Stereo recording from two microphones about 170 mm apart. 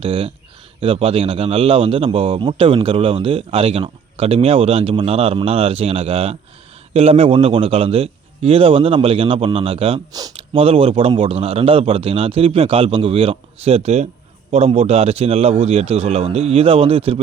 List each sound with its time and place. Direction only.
0.0 s a man's voice: 30° right (ahead or behind)
10.1 s speech: 20° right (ahead or behind)
10.3 s a man's voice: 35° right (ahead or behind)